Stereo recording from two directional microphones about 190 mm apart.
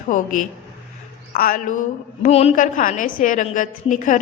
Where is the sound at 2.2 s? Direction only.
35° left (ahead or behind).